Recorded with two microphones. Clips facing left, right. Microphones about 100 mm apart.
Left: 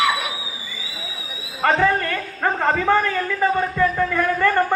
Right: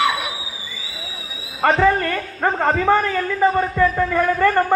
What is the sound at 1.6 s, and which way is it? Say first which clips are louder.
A man's voice: right 2 dB; 25° right (ahead or behind).